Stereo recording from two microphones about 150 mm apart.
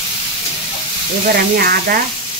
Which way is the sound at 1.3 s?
90° right.